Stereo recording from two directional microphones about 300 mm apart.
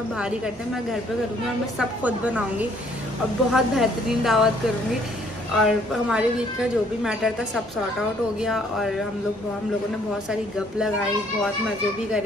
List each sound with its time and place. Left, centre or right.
1.8 s a woman's voice: centre
3.5 s a woman's voice: centre
5.6 s a woman's voice: centre